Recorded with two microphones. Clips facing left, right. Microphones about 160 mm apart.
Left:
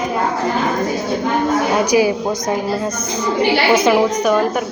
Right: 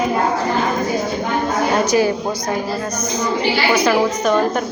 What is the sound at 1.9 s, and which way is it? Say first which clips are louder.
Music: left 2 dB; 10° left (ahead or behind).